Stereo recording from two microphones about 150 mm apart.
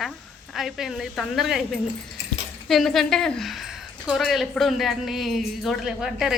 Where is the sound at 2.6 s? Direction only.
Centre (ahead or behind).